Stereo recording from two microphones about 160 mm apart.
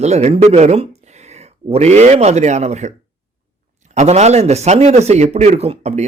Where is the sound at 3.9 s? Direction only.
45° right (ahead or behind).